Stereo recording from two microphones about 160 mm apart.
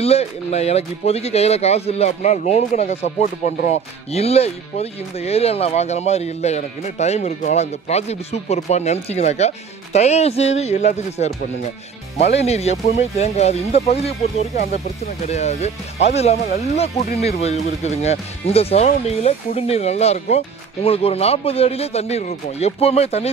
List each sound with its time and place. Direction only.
0.0 s speech: 40° left (ahead or behind)
12.4 s speech: 40° left (ahead or behind)
15.2 s speech: 45° left (ahead or behind)